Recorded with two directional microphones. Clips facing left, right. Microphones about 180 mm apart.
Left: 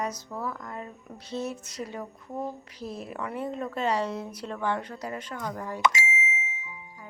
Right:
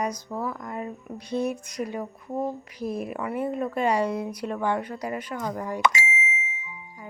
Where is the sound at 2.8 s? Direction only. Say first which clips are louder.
Right 6 dB; 15° right (ahead or behind).